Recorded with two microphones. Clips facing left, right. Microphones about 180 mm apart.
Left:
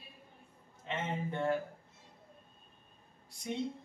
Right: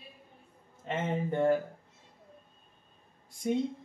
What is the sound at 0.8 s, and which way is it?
Speech, 45° right (ahead or behind).